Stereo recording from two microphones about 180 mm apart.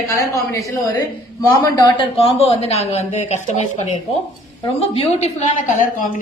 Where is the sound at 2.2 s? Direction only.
35° left (ahead or behind).